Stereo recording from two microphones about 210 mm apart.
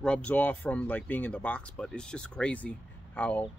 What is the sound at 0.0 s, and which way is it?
Speech, 5° left (ahead or behind).